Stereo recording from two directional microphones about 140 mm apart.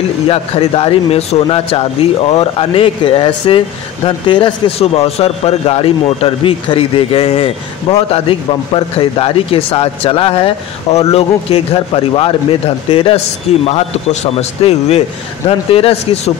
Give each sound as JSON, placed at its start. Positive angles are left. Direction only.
{"t": 0.3, "sound": "speech", "side_deg": 40}